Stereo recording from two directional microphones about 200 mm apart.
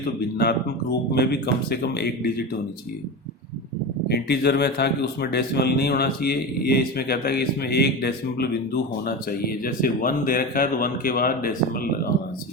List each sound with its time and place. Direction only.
0.3 s speech: 50° left (ahead or behind)
4.1 s speech: 55° left (ahead or behind)